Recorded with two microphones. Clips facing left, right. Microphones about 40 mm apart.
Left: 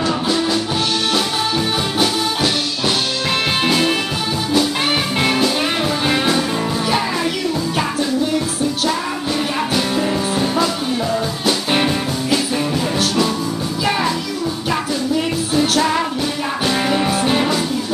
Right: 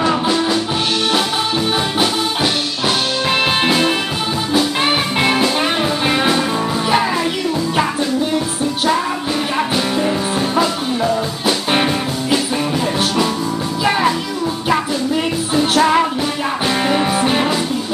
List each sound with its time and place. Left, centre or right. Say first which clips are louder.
0.0 s music: right 2 dB; right
3.3 s music: right 2 dB; centre
5.2 s music: right 2 dB; centre
9.6 s music: right 2 dB; centre
13.8 s music: right 3 dB; centre
15.5 s music: right 3 dB; right